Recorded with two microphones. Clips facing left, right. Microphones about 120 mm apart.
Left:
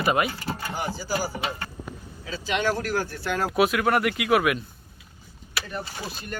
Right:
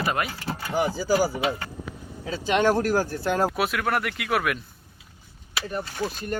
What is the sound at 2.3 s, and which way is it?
Speech, 50° right (ahead or behind).